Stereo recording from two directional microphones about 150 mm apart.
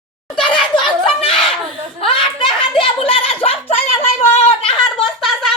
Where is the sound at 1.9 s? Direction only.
35° left (ahead or behind).